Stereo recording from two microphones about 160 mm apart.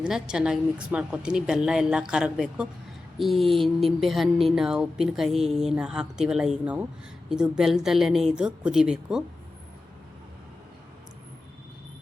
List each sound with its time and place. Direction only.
0.0 s a woman's voice: 5° right (ahead or behind)